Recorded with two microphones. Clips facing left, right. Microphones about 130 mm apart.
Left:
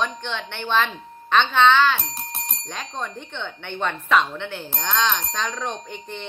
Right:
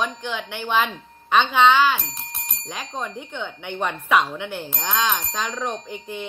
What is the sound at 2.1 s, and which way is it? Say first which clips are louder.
Speech: left 4 dB; 35° left (ahead or behind).